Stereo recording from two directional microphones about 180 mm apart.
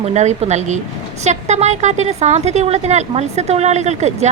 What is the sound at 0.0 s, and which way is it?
A woman's voice, 40° right (ahead or behind).